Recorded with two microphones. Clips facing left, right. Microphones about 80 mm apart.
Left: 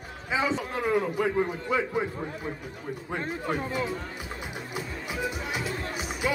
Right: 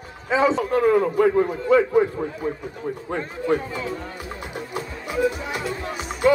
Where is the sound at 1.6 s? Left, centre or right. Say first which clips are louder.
Right 10 dB; centre.